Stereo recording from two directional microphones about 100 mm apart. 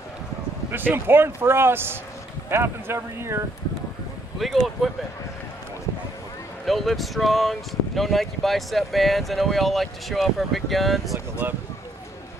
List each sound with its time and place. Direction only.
0.7 s a man's voice: 20° right (ahead or behind)
4.4 s speech: centre (ahead or behind)
6.6 s speech: centre (ahead or behind)